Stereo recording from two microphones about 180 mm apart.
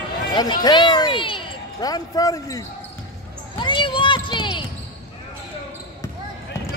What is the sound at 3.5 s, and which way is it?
Basketball bounce, 25° left (ahead or behind).